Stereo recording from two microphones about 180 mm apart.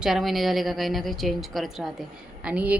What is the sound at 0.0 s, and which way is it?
A woman's voice, centre (ahead or behind).